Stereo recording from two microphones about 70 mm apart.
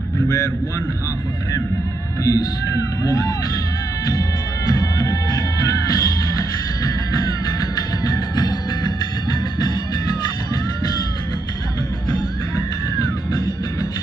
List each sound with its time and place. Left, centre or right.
2.2 s speech: left
4.6 s music: left
8.0 s music: left